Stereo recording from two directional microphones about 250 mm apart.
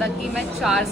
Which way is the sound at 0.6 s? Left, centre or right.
Centre.